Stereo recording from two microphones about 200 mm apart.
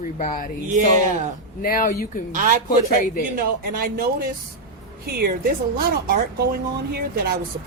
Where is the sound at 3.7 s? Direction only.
50° right (ahead or behind).